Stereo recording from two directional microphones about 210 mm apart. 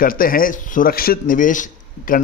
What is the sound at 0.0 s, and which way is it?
A man's voice, 45° left (ahead or behind).